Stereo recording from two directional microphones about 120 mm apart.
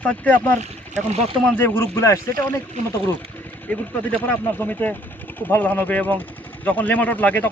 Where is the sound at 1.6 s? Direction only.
20° left (ahead or behind).